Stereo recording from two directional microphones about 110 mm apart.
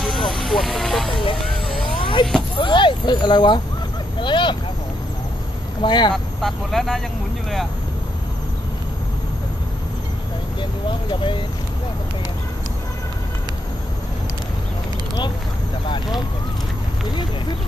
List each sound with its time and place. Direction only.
0.0 s vehicle: centre (ahead or behind)
1.2 s vehicle: 50° left (ahead or behind)
2.5 s a sound: 45° left (ahead or behind)
5.8 s speech: 45° left (ahead or behind)
6.1 s speech: centre (ahead or behind)
10.6 s a sound: 45° left (ahead or behind)